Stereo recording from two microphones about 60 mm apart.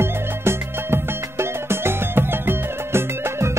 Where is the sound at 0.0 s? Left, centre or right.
Right.